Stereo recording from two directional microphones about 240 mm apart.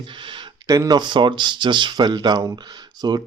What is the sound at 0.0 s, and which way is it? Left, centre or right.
Speech, right.